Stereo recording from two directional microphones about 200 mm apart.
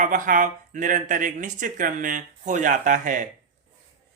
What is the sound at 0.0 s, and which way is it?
Speech, 40° right (ahead or behind).